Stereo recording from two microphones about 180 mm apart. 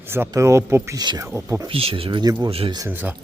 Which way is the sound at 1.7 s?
30° right (ahead or behind).